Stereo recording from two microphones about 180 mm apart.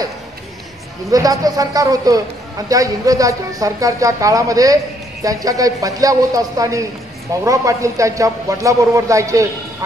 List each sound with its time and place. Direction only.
1.1 s a woman's voice: 20° right (ahead or behind)